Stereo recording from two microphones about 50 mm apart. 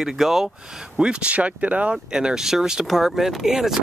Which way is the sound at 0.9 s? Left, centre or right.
Centre.